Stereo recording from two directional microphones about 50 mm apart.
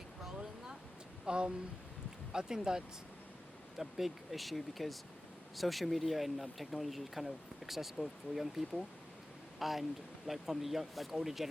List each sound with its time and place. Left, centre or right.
1.2 s speech: centre